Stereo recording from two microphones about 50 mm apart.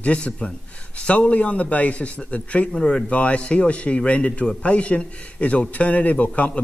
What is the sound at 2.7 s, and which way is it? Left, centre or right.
Speech, centre.